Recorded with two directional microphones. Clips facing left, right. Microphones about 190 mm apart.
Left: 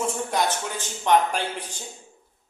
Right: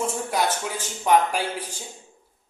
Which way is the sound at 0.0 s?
5° right (ahead or behind).